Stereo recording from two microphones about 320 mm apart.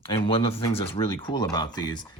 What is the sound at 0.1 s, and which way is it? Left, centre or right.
Speech, centre.